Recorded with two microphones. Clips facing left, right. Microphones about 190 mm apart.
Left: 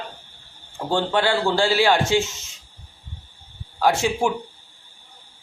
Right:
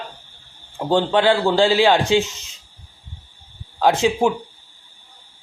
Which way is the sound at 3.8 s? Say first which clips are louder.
Right 3 dB; 20° right (ahead or behind).